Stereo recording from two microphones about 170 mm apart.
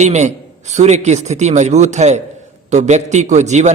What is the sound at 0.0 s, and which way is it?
A man's voice, 45° right (ahead or behind).